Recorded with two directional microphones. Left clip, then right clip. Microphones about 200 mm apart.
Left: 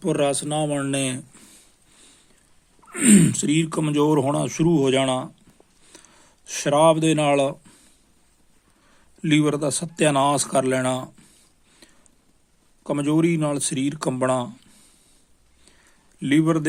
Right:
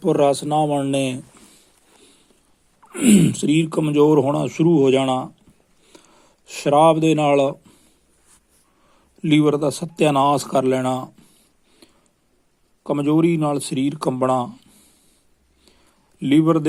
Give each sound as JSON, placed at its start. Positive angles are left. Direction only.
{"t": 0.0, "sound": "speech", "side_deg": 5}
{"t": 1.4, "sound": "a sound", "side_deg": 20}
{"t": 2.9, "sound": "speech", "side_deg": 10}
{"t": 5.8, "sound": "a sound", "side_deg": 10}
{"t": 9.2, "sound": "speech", "side_deg": 10}
{"t": 16.2, "sound": "speech", "side_deg": 0}